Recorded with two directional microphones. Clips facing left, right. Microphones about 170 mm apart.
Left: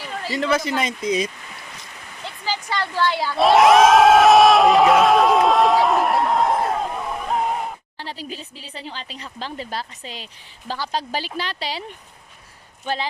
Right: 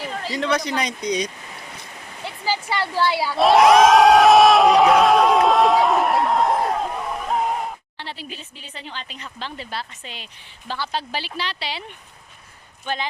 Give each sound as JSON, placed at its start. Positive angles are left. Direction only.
{"t": 0.3, "sound": "speech", "side_deg": 0}
{"t": 2.2, "sound": "crowd", "side_deg": -10}
{"t": 7.9, "sound": "speech", "side_deg": 40}
{"t": 12.8, "sound": "speech", "side_deg": 35}